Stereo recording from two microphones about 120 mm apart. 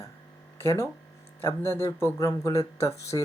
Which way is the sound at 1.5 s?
20° left (ahead or behind).